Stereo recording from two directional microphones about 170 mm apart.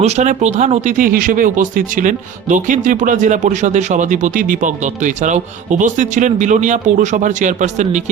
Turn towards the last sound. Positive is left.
turn(degrees=-45)  # may be behind; listen again after turning